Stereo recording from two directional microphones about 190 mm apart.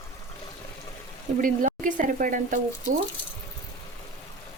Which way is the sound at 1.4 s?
45° right (ahead or behind).